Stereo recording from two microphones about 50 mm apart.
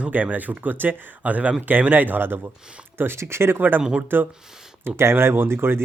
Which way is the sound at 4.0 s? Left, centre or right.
Right.